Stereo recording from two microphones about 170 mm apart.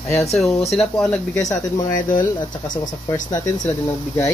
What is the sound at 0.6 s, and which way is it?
Speech, centre (ahead or behind).